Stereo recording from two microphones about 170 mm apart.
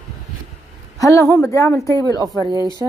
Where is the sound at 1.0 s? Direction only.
20° left (ahead or behind).